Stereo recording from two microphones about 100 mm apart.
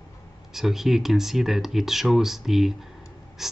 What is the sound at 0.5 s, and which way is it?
Speech, 5° right (ahead or behind).